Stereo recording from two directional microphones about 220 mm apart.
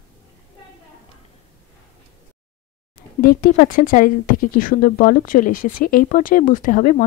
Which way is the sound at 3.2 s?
40° left (ahead or behind).